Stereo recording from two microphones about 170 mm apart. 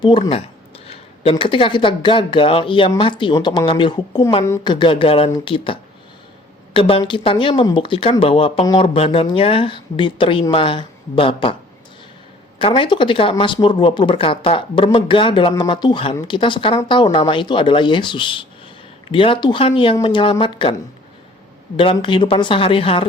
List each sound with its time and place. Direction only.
0.2 s speech: 35° left (ahead or behind)
4.4 s a woman's voice: 15° left (ahead or behind)
4.7 s speech: 30° left (ahead or behind)
12.5 s speech: 30° left (ahead or behind)
21.8 s speech: 30° left (ahead or behind)